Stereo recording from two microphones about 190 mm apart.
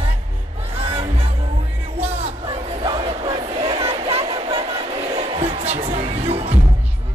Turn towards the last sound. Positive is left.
turn(degrees=-30)  # may be behind; listen again after turning